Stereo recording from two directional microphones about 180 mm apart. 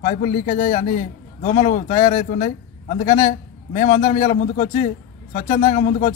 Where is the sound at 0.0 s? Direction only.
45° left (ahead or behind).